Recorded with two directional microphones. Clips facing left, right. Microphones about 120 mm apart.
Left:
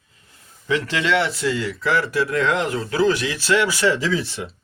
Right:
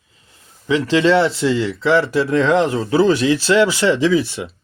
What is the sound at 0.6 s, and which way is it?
Speech, 20° right (ahead or behind).